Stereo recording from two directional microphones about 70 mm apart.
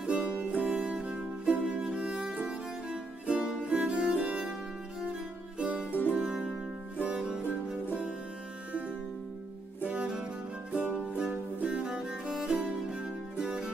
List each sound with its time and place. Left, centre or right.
0.0 s music: centre
5.6 s music: centre
5.9 s music: left
6.1 s music: centre
9.8 s music: centre